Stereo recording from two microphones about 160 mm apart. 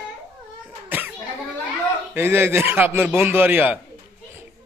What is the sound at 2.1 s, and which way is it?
A man's voice, 15° right (ahead or behind).